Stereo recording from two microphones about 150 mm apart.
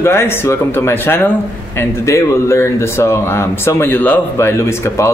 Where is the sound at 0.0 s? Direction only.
15° left (ahead or behind).